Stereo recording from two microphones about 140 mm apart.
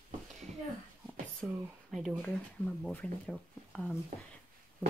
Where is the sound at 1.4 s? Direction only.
Centre (ahead or behind).